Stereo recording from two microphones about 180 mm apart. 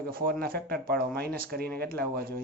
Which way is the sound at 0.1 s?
55° right (ahead or behind).